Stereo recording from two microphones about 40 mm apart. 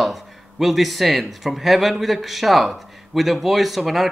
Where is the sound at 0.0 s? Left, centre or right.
Centre.